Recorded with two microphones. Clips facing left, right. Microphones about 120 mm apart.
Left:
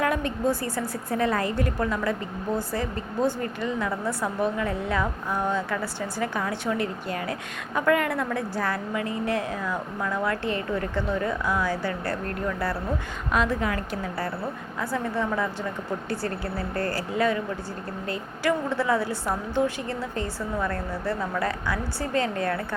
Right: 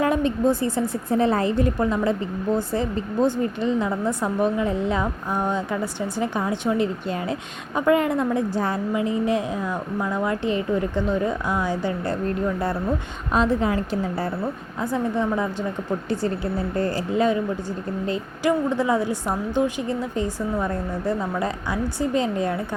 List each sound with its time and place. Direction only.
0.0 s a woman's voice: 25° right (ahead or behind)